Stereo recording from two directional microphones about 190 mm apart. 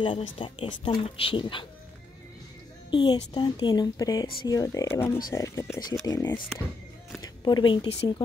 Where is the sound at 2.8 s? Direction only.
25° left (ahead or behind).